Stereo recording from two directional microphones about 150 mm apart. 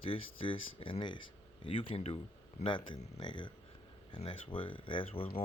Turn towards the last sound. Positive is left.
turn(degrees=35)  # may be behind; listen again after turning